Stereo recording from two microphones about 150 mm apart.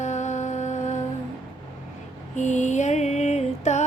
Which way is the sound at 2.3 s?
50° left (ahead or behind).